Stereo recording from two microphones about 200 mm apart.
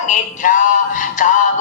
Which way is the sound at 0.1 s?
40° left (ahead or behind).